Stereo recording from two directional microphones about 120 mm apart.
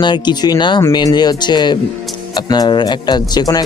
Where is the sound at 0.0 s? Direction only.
40° left (ahead or behind).